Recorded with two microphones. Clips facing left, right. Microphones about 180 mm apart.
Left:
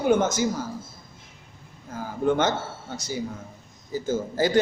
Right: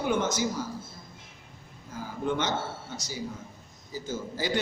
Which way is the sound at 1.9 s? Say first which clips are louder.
Left 4 dB; 50° left (ahead or behind).